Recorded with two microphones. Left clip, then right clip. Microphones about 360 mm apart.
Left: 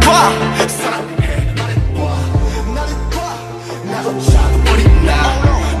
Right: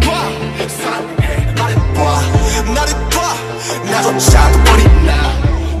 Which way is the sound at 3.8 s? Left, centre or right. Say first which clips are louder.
Right 6 dB; right.